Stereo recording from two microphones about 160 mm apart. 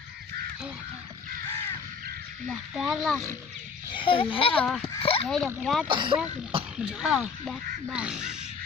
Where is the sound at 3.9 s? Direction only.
30° left (ahead or behind).